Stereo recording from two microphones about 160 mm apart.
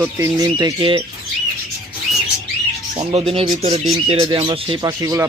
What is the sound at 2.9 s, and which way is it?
Speech, 30° right (ahead or behind).